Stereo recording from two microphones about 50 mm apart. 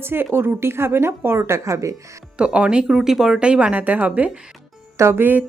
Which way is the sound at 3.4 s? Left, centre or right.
Right.